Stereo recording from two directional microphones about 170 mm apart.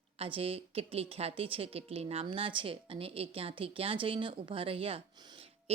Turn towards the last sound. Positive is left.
turn(degrees=-35)  # may be behind; listen again after turning